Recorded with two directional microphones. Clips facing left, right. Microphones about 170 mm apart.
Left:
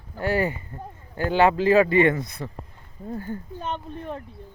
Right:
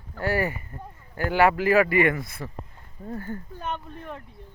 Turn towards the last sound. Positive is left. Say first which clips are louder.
# left 4 dB
turn(degrees=30)  # may be behind; listen again after turning